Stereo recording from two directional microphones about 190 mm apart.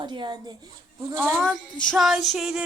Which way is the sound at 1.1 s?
10° right (ahead or behind).